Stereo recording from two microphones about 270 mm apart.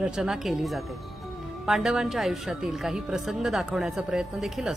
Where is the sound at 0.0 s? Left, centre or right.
Centre.